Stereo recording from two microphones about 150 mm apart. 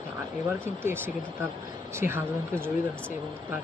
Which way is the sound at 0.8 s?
15° right (ahead or behind).